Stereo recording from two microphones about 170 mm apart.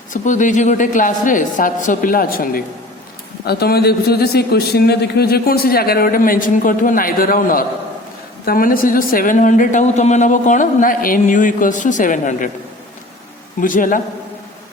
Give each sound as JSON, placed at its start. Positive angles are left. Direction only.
{"t": 0.1, "sound": "a man's voice", "side_deg": 50}
{"t": 13.6, "sound": "speech", "side_deg": 55}